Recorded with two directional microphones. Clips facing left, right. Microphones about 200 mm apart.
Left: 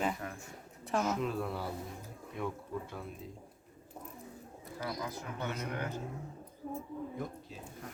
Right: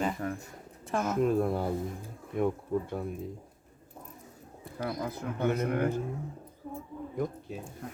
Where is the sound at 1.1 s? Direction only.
50° right (ahead or behind).